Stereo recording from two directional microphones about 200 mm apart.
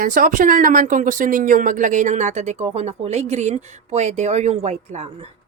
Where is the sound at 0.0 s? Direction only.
40° right (ahead or behind).